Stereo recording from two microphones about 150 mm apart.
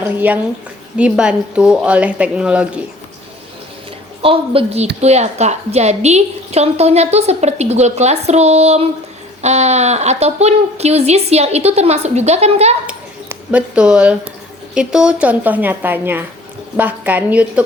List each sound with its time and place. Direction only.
0.0 s a woman's voice: 15° right (ahead or behind)
4.2 s a woman's voice: 40° right (ahead or behind)
12.9 s a sound: 10° right (ahead or behind)
14.8 s a woman's voice: 5° right (ahead or behind)